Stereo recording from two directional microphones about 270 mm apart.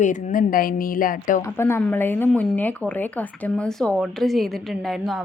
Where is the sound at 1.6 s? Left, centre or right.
Centre.